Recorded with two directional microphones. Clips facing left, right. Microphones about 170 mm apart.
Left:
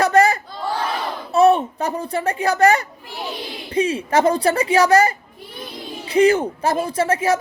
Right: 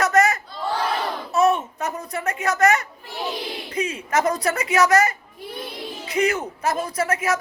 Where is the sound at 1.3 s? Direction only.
30° left (ahead or behind).